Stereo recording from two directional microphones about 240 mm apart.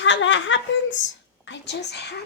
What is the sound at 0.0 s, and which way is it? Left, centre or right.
A woman's voice, left.